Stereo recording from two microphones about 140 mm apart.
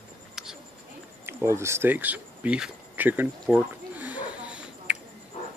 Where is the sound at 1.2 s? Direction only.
20° right (ahead or behind).